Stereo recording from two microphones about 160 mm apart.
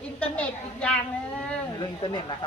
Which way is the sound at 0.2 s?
5° left (ahead or behind).